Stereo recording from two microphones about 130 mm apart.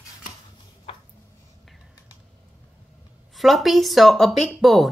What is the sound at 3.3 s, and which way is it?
Speech, centre (ahead or behind).